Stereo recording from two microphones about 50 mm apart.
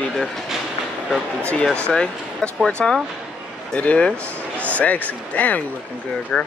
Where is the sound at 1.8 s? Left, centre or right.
Left.